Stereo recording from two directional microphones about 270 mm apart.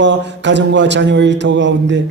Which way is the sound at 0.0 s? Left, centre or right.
Right.